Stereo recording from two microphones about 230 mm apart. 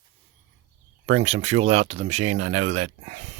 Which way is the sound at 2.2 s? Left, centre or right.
Right.